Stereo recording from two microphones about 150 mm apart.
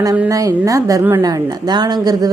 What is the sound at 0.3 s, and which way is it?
A woman's voice, 20° right (ahead or behind).